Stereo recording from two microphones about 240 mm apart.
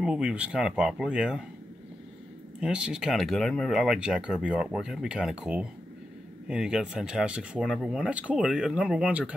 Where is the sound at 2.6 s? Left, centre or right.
Centre.